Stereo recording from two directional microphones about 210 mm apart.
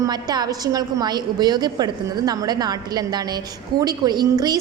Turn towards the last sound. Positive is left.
turn(degrees=-20)  # may be behind; listen again after turning